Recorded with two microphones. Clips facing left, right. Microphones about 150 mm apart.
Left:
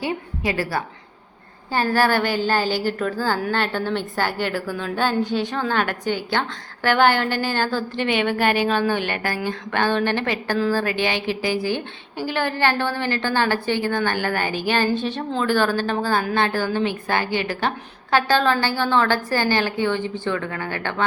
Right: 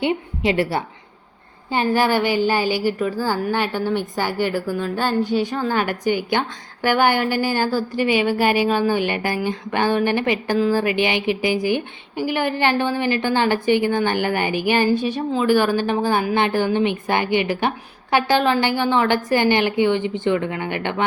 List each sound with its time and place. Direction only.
0.0 s a woman's voice: 25° right (ahead or behind)